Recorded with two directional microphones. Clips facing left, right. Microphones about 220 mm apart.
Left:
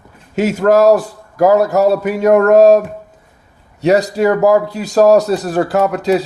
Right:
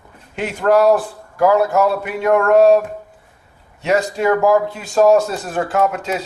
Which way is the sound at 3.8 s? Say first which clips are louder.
Left 5 dB; 35° left (ahead or behind).